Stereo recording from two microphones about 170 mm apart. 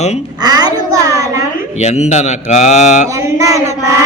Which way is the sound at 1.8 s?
40° left (ahead or behind).